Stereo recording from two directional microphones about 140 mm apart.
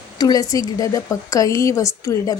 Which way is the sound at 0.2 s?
25° left (ahead or behind).